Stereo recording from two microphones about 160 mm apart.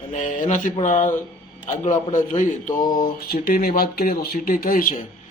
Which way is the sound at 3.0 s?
70° left (ahead or behind).